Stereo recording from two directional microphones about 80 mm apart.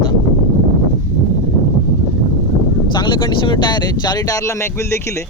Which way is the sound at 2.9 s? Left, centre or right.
Left.